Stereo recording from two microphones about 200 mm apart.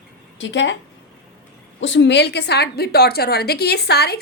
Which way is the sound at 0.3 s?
65° left (ahead or behind).